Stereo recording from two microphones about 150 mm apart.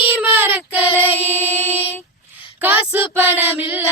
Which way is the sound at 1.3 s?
15° left (ahead or behind).